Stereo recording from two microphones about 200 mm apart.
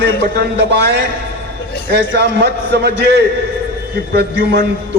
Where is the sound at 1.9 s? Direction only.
55° right (ahead or behind).